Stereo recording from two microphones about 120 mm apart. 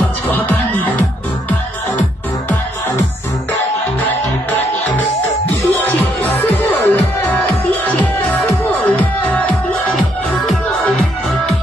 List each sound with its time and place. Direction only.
0.5 s music: 15° left (ahead or behind)
5.7 s music: 15° left (ahead or behind)
8.8 s music: 15° left (ahead or behind)